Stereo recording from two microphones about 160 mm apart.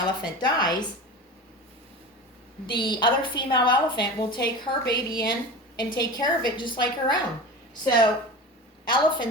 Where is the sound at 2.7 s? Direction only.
30° left (ahead or behind).